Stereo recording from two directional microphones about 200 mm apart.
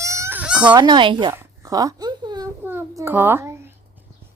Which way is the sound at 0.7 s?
20° right (ahead or behind).